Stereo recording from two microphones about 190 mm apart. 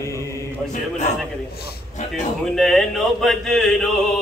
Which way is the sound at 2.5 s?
Centre (ahead or behind).